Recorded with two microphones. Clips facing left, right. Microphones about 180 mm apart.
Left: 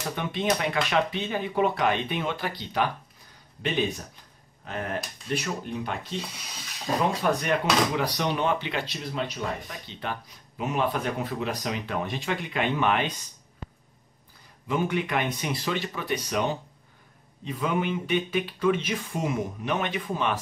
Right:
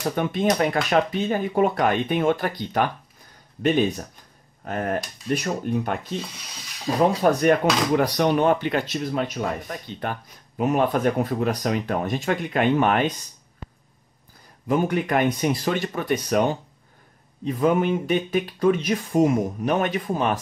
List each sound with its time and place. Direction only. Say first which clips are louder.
0.1 s speech: right 4 dB; 45° right (ahead or behind)
7.2 s speech: right 7 dB; 40° right (ahead or behind)
14.7 s speech: right 5 dB; 45° right (ahead or behind)